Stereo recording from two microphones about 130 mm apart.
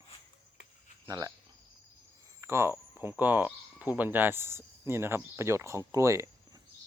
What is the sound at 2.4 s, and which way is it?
Speech, 20° right (ahead or behind).